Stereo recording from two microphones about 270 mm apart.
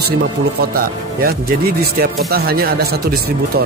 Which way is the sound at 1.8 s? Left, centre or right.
Right.